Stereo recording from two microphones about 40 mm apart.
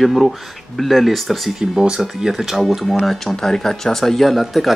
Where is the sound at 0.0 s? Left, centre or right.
Centre.